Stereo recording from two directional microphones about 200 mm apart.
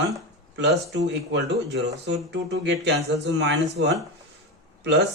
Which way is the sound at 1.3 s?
60° right (ahead or behind).